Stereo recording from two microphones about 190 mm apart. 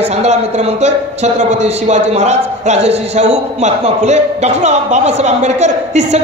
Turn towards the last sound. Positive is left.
turn(degrees=-35)  # may be behind; listen again after turning